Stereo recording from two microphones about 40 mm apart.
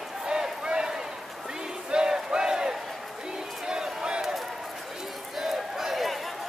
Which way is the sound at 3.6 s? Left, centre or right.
Centre.